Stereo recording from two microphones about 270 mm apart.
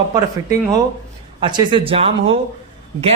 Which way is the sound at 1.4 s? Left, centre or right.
Centre.